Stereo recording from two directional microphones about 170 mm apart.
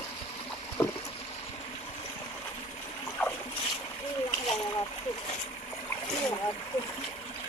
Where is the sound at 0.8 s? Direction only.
20° left (ahead or behind).